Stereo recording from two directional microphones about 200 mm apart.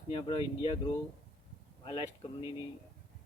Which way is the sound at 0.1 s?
25° left (ahead or behind).